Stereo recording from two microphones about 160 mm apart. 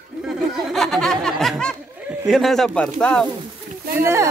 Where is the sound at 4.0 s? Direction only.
15° right (ahead or behind).